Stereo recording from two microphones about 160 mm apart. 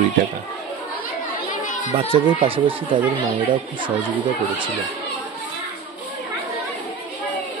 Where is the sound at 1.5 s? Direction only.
55° left (ahead or behind).